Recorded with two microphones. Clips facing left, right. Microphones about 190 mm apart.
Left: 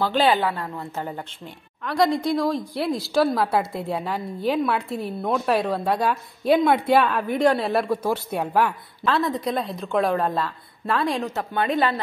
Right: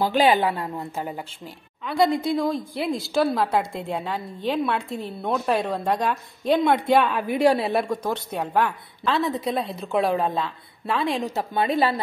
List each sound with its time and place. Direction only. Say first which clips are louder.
0.0 s a woman's voice: right 1 dB; 15° right (ahead or behind); by 11.1 s centre (ahead or behind)
11.2 s a woman's voice: right 1 dB; 10° right (ahead or behind)